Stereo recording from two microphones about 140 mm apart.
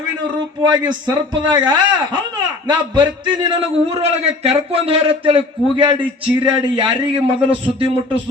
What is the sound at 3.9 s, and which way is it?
A man's voice, 45° right (ahead or behind).